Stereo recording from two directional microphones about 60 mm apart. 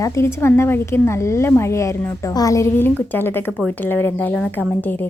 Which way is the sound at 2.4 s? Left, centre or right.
Left.